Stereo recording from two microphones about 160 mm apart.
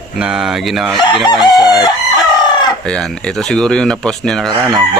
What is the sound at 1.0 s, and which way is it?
Chicken, 25° left (ahead or behind).